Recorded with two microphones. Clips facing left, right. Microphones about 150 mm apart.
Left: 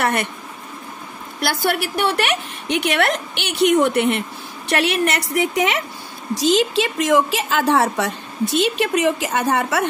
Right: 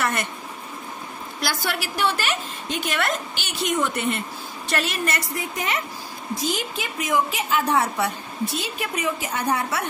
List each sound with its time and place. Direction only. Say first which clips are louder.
0.0 s a woman's voice: left 5 dB; 60° left (ahead or behind)
1.4 s a woman's voice: left 7 dB; 60° left (ahead or behind); by 5.8 s 75° left (ahead or behind)
6.3 s a woman's voice: left 10 dB; 90° left